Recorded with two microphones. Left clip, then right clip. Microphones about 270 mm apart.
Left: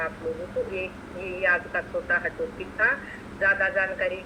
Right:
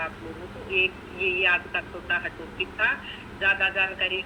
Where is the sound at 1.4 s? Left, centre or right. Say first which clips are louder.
Left 4 dB; centre.